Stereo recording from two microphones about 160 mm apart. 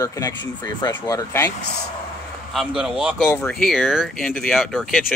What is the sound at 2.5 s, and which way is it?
Speech, centre (ahead or behind).